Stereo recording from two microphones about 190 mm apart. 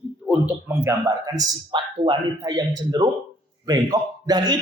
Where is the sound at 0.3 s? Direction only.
10° right (ahead or behind).